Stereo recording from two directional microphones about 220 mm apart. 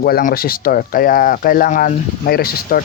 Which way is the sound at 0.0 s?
40° left (ahead or behind).